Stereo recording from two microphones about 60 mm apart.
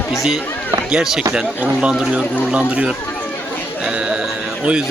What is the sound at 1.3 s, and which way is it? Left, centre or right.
Speech, centre.